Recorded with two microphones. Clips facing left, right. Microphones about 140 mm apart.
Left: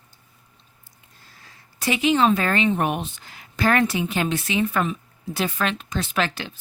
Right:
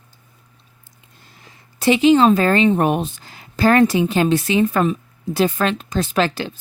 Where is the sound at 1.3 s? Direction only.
25° right (ahead or behind).